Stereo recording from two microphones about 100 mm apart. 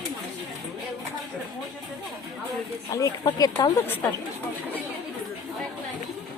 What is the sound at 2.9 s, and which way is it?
Speech, 35° left (ahead or behind).